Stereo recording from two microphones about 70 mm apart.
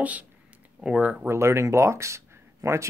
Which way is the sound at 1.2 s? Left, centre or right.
Right.